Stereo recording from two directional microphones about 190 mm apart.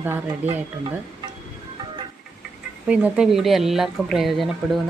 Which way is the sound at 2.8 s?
5° right (ahead or behind).